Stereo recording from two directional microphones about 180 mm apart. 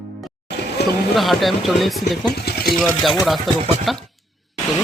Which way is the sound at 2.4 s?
60° left (ahead or behind).